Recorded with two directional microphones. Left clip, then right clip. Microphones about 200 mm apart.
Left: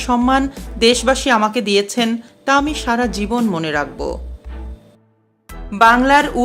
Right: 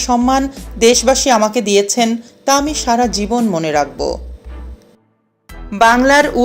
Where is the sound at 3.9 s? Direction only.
20° left (ahead or behind).